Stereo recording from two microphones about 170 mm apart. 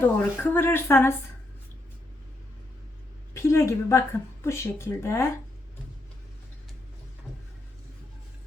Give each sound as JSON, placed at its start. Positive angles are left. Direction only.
{"t": 0.0, "sound": "speech", "side_deg": 10}
{"t": 3.3, "sound": "speech", "side_deg": 15}